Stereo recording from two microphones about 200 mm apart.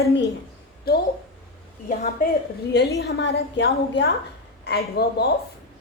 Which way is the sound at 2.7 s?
55° left (ahead or behind).